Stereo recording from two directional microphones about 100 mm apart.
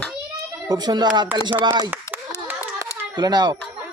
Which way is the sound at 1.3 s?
20° right (ahead or behind).